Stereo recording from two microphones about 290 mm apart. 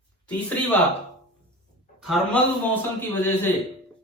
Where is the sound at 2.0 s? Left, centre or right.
Centre.